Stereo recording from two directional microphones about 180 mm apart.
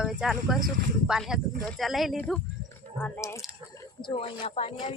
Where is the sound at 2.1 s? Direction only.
10° left (ahead or behind).